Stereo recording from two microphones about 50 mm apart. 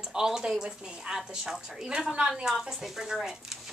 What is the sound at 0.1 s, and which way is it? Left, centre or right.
Speech, centre.